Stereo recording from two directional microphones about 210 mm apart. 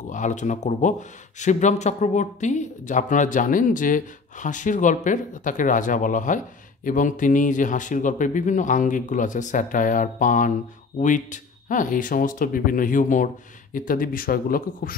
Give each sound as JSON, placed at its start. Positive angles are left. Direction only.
{"t": 0.1, "sound": "speech", "side_deg": 35}